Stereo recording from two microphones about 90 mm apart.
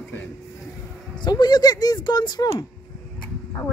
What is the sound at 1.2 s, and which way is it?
Speech, 50° left (ahead or behind).